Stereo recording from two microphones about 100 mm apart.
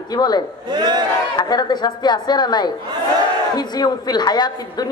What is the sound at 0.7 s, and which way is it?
Speech, 45° right (ahead or behind).